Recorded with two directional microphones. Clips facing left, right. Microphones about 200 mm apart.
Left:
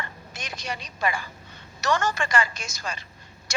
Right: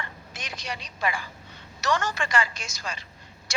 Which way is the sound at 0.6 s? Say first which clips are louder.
Left 2 dB; 45° left (ahead or behind).